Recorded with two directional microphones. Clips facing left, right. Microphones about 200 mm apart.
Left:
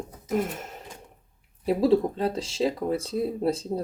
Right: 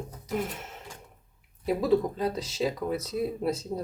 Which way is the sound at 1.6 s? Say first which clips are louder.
Left 3 dB; 30° left (ahead or behind).